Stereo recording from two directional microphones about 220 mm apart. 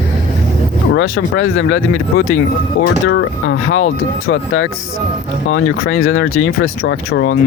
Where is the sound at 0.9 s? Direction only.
60° left (ahead or behind).